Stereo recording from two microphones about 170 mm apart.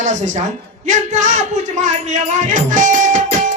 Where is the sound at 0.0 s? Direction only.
45° right (ahead or behind).